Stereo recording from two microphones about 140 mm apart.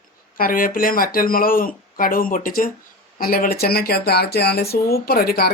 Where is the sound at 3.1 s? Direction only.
90° left.